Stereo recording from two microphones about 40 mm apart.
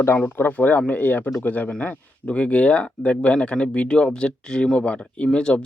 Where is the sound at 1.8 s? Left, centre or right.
Left.